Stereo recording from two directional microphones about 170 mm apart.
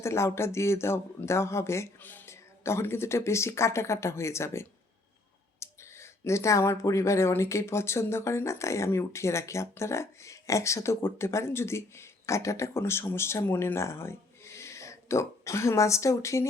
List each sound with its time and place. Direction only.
0.0 s speech: 15° left (ahead or behind)